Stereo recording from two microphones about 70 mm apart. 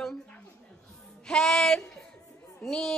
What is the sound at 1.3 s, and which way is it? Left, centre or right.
Music, centre.